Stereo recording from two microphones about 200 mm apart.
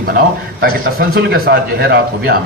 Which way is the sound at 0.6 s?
50° right (ahead or behind).